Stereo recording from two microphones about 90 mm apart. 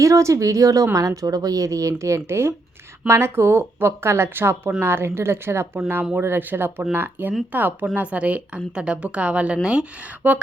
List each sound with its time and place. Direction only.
0.0 s a woman's voice: 35° right (ahead or behind); by 10.4 s 15° right (ahead or behind)